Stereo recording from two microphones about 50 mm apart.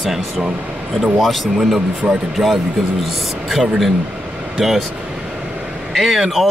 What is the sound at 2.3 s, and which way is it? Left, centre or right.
A man's voice, centre.